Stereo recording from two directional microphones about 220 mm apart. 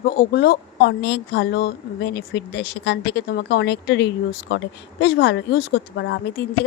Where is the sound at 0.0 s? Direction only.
45° left (ahead or behind).